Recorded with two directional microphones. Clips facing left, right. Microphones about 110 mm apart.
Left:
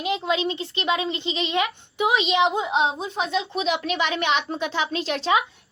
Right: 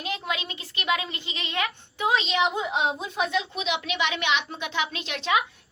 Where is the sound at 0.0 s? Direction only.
25° left (ahead or behind).